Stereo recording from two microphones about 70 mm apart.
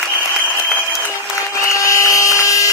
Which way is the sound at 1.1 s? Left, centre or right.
Left.